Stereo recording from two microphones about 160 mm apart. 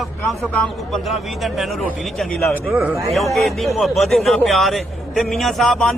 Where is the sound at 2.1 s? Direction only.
Centre (ahead or behind).